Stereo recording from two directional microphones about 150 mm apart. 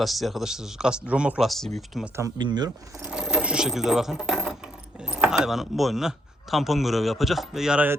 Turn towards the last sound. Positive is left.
turn(degrees=-10)  # may be behind; listen again after turning